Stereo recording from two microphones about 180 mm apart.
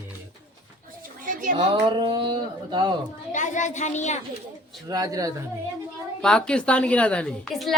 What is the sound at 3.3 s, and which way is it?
Speech, 45° left (ahead or behind).